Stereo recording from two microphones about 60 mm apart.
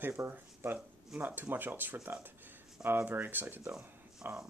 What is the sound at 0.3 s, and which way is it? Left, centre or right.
Speech, right.